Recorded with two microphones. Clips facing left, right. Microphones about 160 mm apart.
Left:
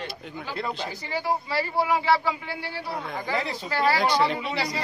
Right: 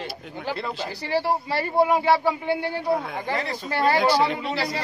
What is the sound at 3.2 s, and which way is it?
Speech, 25° right (ahead or behind).